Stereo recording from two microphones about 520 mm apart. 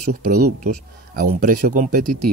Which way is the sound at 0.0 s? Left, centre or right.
Centre.